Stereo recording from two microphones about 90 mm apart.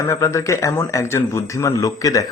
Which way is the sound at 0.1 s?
35° left (ahead or behind).